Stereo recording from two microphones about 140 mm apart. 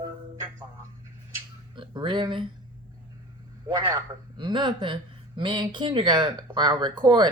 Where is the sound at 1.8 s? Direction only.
35° right (ahead or behind).